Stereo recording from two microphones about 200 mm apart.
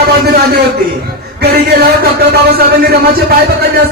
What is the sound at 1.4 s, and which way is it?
A man's voice, 50° right (ahead or behind).